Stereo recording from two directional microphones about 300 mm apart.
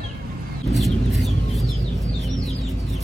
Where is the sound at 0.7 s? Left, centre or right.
Centre.